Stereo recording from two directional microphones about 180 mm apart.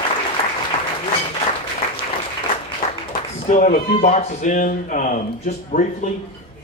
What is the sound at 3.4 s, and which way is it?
Speech, 45° left (ahead or behind).